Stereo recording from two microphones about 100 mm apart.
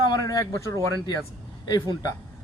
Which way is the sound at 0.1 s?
40° left (ahead or behind).